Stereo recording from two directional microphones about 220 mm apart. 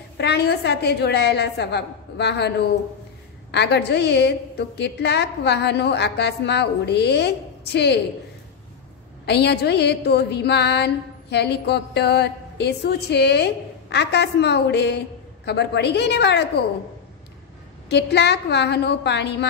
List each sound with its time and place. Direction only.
0.2 s a woman's voice: 50° left (ahead or behind)
3.5 s a woman's voice: 50° left (ahead or behind)
9.2 s a woman's voice: 50° left (ahead or behind)
17.8 s a woman's voice: 50° left (ahead or behind)